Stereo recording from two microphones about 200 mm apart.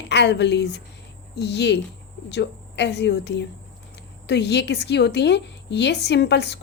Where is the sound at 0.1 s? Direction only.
60° left (ahead or behind).